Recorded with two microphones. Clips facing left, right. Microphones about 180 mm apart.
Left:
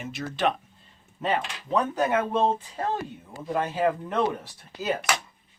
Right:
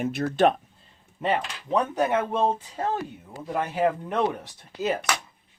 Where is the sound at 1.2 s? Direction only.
15° right (ahead or behind).